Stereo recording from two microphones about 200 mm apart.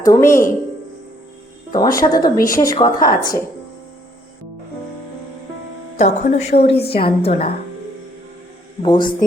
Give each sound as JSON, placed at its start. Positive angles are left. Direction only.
{"t": 0.0, "sound": "speech", "side_deg": 15}
{"t": 1.7, "sound": "a woman's voice", "side_deg": 15}
{"t": 6.0, "sound": "a woman's voice", "side_deg": 35}
{"t": 8.8, "sound": "a woman's voice", "side_deg": 25}